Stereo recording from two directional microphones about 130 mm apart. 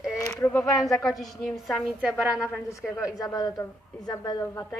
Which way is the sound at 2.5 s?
25° left (ahead or behind).